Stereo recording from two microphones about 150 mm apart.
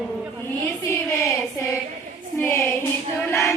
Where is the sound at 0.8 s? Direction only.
20° left (ahead or behind).